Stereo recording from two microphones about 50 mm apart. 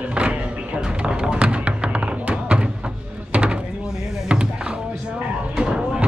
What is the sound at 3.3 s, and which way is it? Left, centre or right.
Door, right.